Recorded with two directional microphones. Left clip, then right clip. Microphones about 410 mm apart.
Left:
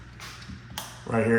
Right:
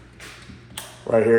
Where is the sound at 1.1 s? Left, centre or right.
Centre.